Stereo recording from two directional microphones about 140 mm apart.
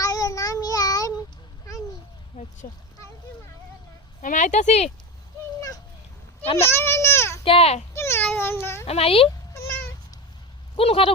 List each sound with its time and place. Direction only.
0.0 s child singing: 25° left (ahead or behind)
2.3 s a sound: 40° left (ahead or behind)
4.2 s speech: 65° left (ahead or behind)
5.5 s a sound: 25° left (ahead or behind)
6.4 s a child's voice: 45° left (ahead or behind)
6.7 s a child's voice: 20° left (ahead or behind)
7.4 s speech: 45° left (ahead or behind)
7.9 s cat: 20° left (ahead or behind)
8.9 s speech: 45° left (ahead or behind)
9.6 s cat: 20° left (ahead or behind)
10.8 s speech: 40° left (ahead or behind)